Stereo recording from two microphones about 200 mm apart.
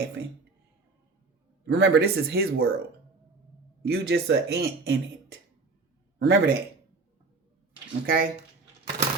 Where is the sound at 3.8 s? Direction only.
55° right (ahead or behind).